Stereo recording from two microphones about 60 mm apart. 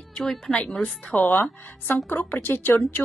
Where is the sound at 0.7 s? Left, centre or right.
Left.